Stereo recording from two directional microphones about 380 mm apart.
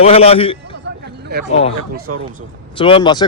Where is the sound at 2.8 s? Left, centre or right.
Centre.